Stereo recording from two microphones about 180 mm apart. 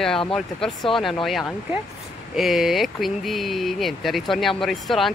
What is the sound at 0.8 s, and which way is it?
Speech, 30° left (ahead or behind).